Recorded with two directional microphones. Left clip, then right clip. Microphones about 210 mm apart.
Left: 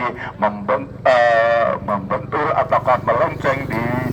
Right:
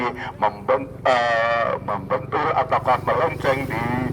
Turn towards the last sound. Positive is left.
turn(degrees=-35)  # may be behind; listen again after turning